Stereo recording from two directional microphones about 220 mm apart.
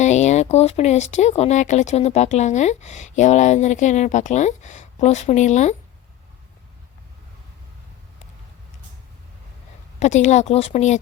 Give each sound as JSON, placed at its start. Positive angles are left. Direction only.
{"t": 0.0, "sound": "speech", "side_deg": 30}
{"t": 10.0, "sound": "speech", "side_deg": 30}